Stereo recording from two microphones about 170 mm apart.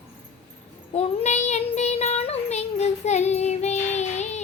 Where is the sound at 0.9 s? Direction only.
40° left (ahead or behind).